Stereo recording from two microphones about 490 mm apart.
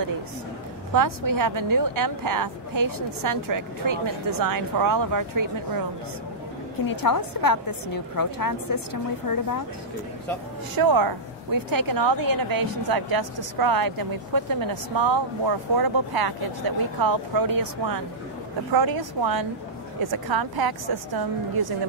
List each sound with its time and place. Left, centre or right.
0.9 s a woman's voice: right
6.9 s a woman's voice: left
10.8 s a woman's voice: right